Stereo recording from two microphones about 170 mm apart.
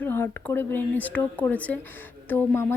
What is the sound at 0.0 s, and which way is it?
Speech, 10° left (ahead or behind).